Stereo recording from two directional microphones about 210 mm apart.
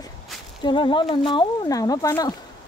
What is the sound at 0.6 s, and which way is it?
Speech, 20° left (ahead or behind).